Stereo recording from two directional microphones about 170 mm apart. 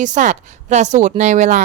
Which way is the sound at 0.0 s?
45° right (ahead or behind).